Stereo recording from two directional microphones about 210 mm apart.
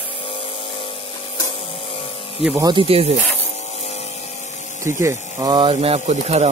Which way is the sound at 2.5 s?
20° right (ahead or behind).